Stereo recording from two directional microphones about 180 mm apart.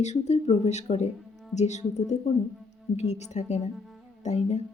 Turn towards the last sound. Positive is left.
turn(degrees=40)  # may be behind; listen again after turning